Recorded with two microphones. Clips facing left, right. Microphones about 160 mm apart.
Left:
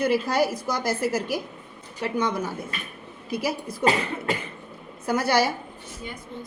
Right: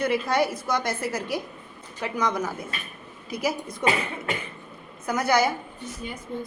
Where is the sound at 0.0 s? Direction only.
30° left (ahead or behind).